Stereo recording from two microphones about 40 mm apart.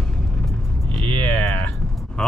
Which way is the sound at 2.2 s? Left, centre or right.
Centre.